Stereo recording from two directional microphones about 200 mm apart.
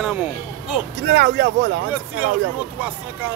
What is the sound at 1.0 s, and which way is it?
Speech, 60° right (ahead or behind).